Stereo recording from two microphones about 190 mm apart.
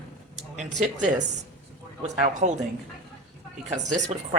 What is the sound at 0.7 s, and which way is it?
A woman's voice, 40° right (ahead or behind).